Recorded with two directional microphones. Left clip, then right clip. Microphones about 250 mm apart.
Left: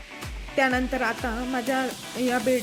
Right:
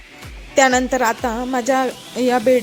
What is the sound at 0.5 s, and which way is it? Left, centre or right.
A woman's voice, right.